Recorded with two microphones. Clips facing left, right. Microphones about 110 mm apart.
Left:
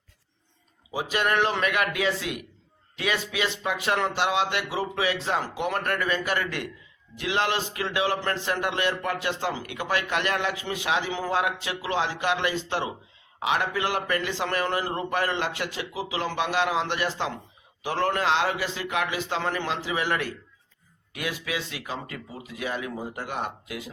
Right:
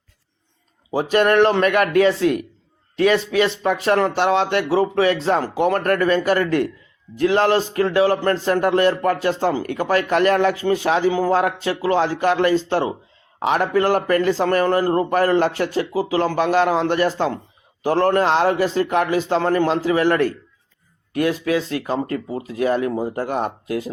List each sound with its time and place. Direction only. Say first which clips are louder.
0.9 s a man's voice: right 9 dB; 45° right (ahead or behind)